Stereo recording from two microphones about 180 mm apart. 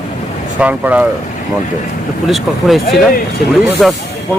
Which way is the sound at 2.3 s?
Centre (ahead or behind).